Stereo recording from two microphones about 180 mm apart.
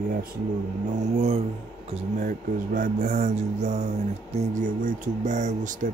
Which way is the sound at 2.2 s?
50° right (ahead or behind).